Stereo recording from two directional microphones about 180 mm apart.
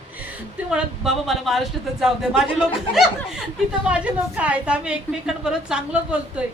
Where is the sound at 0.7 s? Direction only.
5° right (ahead or behind).